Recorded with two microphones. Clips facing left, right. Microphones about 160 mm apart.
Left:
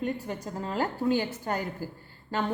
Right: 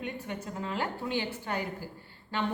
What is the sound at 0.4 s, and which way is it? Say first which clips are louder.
A woman's voice: left 4 dB; 40° left (ahead or behind).